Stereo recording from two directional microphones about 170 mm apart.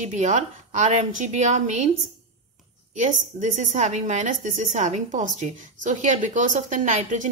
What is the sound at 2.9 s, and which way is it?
A woman's voice, 45° right (ahead or behind).